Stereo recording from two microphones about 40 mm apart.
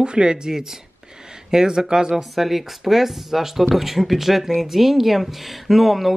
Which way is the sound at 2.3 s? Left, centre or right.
Centre.